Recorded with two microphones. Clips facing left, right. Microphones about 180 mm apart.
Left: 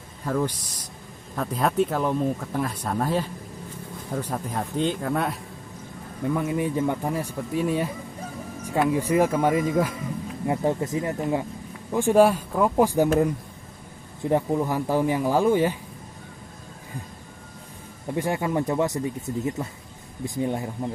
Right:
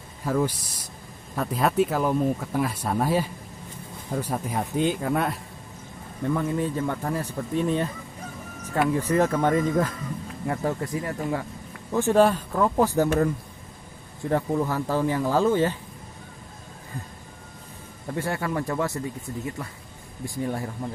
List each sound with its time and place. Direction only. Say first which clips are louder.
0.2 s speech: right 1 dB; 5° right (ahead or behind)
6.2 s speech: even; 10° left (ahead or behind)
10.4 s speech: left 3 dB; 20° left (ahead or behind)
14.2 s speech: left 1 dB; 15° left (ahead or behind)
18.0 s speech: left 3 dB; 15° left (ahead or behind)